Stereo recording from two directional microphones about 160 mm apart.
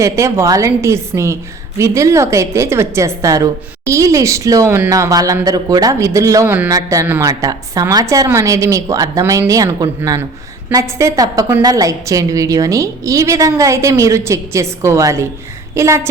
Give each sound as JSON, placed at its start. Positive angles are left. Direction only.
{"t": 0.0, "sound": "a woman's voice", "side_deg": -20}